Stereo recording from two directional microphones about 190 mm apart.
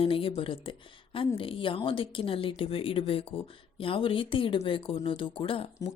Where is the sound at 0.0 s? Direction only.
30° left (ahead or behind).